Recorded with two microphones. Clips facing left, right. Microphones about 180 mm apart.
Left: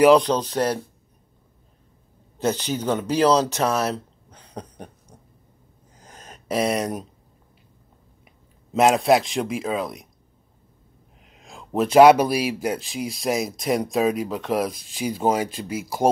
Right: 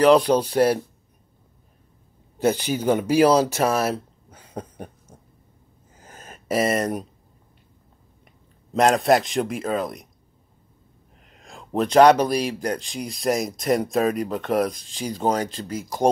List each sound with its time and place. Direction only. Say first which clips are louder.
0.2 s speech: right 4 dB; 10° right (ahead or behind)
2.3 s speech: right 2 dB; 10° right (ahead or behind)
5.9 s a sound: right 1 dB; 5° right (ahead or behind)
8.7 s speech: left 1 dB; 5° left (ahead or behind)
11.2 s speech: even; centre (ahead or behind)